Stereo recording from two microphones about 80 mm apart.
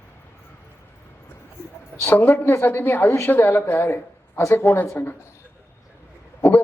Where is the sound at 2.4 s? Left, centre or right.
Left.